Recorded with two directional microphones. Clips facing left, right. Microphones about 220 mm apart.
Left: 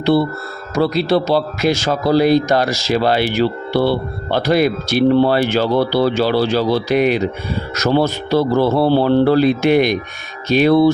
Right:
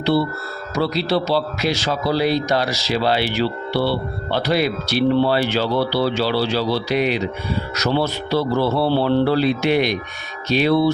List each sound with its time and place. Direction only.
0.0 s a man's voice: 50° left (ahead or behind)